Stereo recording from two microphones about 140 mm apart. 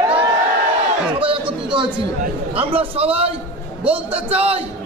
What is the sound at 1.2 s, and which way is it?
Chatter, 40° right (ahead or behind).